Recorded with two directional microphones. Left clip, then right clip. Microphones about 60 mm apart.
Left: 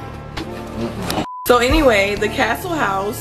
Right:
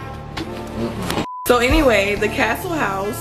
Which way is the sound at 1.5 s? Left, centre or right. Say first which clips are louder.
Left 2 dB; left.